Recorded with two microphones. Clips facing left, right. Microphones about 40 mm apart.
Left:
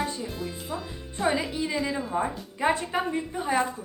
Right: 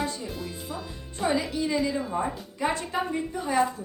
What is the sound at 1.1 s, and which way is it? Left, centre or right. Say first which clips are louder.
Speech: even; centre.